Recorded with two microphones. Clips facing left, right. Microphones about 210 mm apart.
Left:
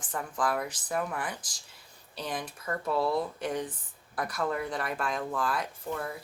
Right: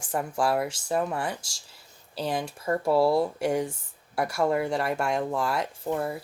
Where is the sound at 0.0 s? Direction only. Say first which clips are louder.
Right 5 dB; 30° right (ahead or behind).